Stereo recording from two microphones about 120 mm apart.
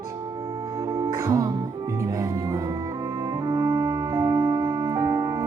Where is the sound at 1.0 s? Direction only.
25° right (ahead or behind).